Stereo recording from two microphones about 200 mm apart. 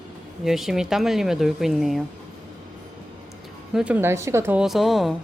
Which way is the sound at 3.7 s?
5° right (ahead or behind).